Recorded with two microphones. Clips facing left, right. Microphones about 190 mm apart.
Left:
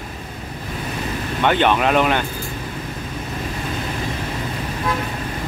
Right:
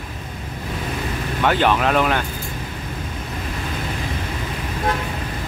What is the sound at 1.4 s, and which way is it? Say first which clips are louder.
Speech: left 1 dB; centre (ahead or behind).